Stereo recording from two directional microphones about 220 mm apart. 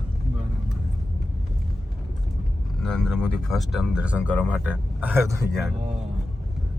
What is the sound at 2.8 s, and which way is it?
Speech, centre (ahead or behind).